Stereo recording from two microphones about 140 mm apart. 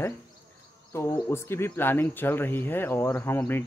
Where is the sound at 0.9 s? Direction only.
20° left (ahead or behind).